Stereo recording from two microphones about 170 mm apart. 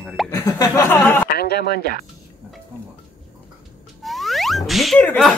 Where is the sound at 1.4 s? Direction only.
70° left (ahead or behind).